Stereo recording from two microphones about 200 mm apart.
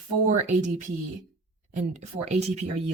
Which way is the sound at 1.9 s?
35° right (ahead or behind).